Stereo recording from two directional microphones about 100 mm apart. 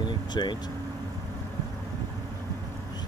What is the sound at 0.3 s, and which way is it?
Speech, 45° left (ahead or behind).